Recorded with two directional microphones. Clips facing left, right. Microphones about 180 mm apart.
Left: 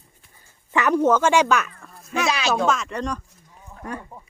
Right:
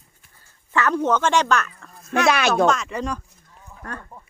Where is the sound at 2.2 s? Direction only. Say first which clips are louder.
Right 5 dB; 60° right (ahead or behind).